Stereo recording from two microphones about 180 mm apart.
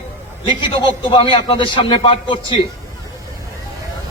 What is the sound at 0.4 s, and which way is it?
A man's voice, 25° left (ahead or behind).